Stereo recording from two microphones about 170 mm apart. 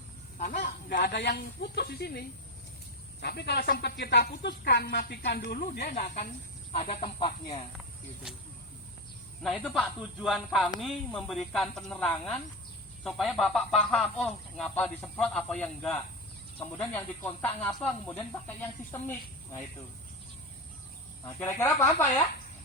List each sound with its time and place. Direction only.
0.9 s speech: 70° left (ahead or behind)
7.0 s speech: 25° left (ahead or behind)
9.4 s speech: 5° left (ahead or behind)
21.3 s speech: 15° left (ahead or behind)